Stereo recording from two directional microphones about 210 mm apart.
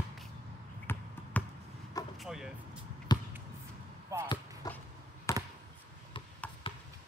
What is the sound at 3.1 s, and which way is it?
Basketball bounce, 20° left (ahead or behind).